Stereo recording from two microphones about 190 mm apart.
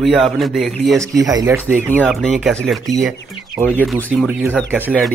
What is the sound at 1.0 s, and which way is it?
Speech, 20° right (ahead or behind).